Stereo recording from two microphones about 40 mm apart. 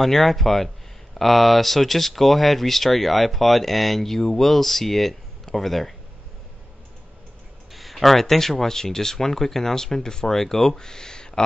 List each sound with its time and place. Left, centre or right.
0.0 s speech: centre
7.7 s speech: centre
10.8 s speech: centre